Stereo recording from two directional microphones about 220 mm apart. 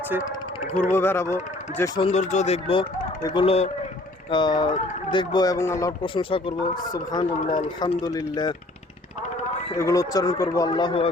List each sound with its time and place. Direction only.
0.8 s speech: 10° left (ahead or behind)
1.8 s a man's voice: 25° left (ahead or behind)
9.7 s speech: 15° left (ahead or behind)